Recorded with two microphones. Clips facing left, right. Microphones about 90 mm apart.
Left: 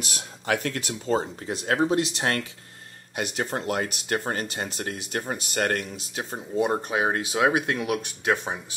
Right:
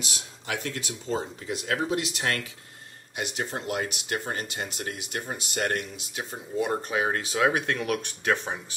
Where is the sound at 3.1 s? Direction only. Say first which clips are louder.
Left 3 dB; 50° left (ahead or behind); by 6.6 s 35° left (ahead or behind).